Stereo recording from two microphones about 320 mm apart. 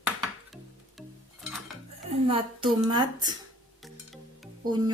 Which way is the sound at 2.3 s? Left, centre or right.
Centre.